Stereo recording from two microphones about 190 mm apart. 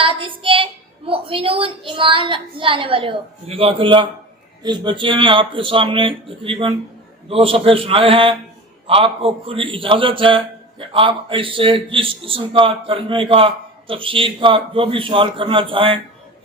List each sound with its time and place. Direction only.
0.0 s a woman's voice: 25° right (ahead or behind)